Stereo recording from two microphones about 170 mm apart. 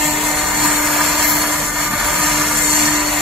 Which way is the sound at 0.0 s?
Centre (ahead or behind).